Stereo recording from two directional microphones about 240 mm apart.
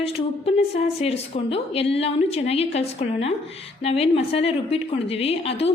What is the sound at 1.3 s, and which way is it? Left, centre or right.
A woman's voice, left.